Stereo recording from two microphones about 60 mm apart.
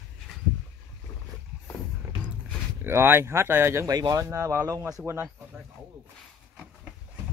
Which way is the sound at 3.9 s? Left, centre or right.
Right.